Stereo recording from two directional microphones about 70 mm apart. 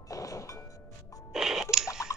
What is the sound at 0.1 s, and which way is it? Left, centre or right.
Music, left.